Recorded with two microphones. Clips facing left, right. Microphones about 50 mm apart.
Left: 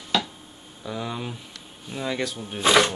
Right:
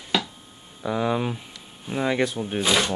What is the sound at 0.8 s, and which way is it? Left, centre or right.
Speech, right.